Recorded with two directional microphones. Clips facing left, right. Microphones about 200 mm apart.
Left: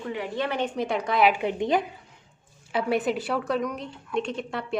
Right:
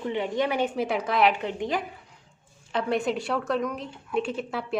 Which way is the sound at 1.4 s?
15° left (ahead or behind).